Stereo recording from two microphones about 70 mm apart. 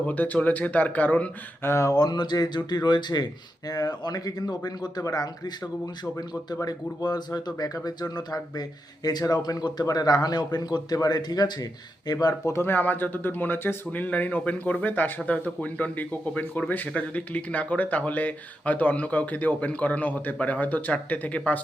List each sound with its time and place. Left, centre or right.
0.0 s speech: left
1.6 s speech: left
2.0 s speech: left
3.7 s speech: left
5.0 s speech: left
5.8 s a man's voice: left
12.3 s speech: left
12.6 s speech: left